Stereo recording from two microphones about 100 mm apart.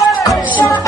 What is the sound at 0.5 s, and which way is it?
Music, 15° left (ahead or behind).